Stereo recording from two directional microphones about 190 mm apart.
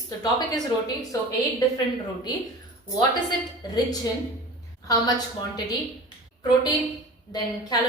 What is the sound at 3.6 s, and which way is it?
Speech, 20° left (ahead or behind).